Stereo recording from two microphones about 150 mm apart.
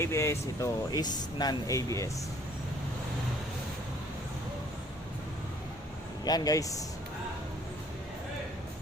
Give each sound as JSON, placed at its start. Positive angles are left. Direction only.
{"t": 0.0, "sound": "speech", "side_deg": 20}
{"t": 6.2, "sound": "speech", "side_deg": 25}